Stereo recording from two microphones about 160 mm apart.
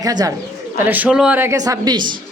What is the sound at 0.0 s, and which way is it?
Speech, 25° right (ahead or behind).